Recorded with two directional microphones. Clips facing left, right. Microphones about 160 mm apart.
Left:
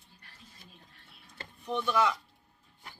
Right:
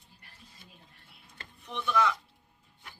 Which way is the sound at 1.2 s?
35° left (ahead or behind).